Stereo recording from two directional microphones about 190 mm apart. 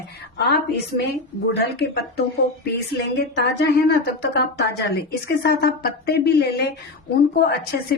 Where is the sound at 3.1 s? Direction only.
65° left (ahead or behind).